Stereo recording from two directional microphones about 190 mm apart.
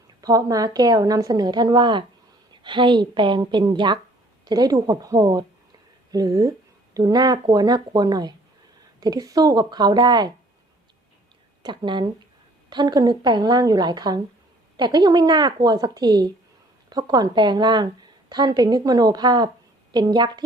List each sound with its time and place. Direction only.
0.2 s a woman's voice: 20° right (ahead or behind)
11.6 s a woman's voice: 25° right (ahead or behind)